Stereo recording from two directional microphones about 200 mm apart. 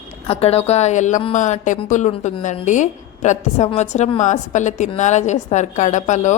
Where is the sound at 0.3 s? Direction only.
30° left (ahead or behind).